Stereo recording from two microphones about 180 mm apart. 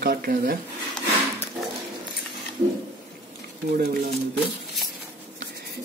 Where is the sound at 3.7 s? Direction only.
55° right (ahead or behind).